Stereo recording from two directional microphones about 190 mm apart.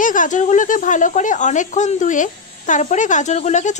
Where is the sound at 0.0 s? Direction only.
45° left (ahead or behind).